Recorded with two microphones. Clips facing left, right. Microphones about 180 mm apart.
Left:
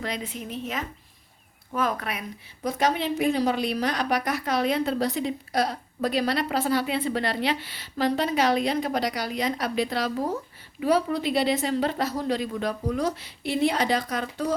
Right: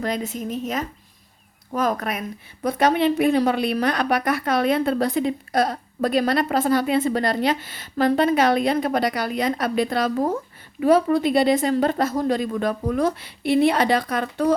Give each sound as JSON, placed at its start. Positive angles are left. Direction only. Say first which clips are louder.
{"t": 0.0, "sound": "a woman's voice", "louder": "right 6 dB", "side_deg": -45}
{"t": 2.6, "sound": "a woman's voice", "louder": "right 6 dB", "side_deg": -60}